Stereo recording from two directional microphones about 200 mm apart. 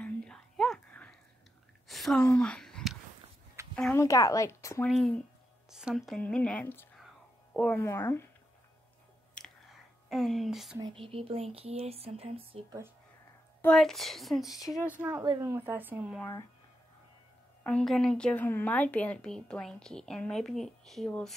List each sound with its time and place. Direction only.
0.0 s whispering: 5° left (ahead or behind)
1.9 s a sound: centre (ahead or behind)
3.7 s speech: 10° left (ahead or behind)
4.8 s a woman's voice: centre (ahead or behind)
10.0 s a woman's voice: centre (ahead or behind)
10.8 s speech: 25° right (ahead or behind)
13.6 s a woman's voice: 5° left (ahead or behind)
17.6 s a woman's voice: 5° left (ahead or behind)